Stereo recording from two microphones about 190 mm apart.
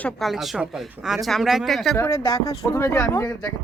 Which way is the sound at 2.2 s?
20° left (ahead or behind).